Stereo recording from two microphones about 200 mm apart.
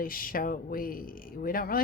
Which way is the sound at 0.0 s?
45° left (ahead or behind).